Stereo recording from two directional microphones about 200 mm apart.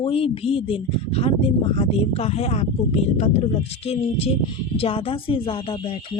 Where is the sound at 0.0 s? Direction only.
30° left (ahead or behind).